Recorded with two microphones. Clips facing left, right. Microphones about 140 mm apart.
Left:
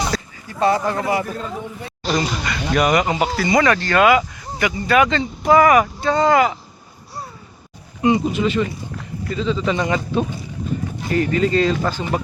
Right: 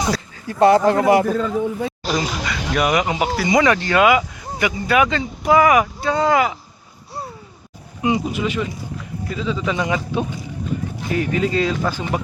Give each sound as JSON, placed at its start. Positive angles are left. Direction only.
{"t": 0.4, "sound": "speech", "side_deg": -65}
{"t": 2.0, "sound": "speech", "side_deg": -5}
{"t": 8.0, "sound": "speech", "side_deg": -5}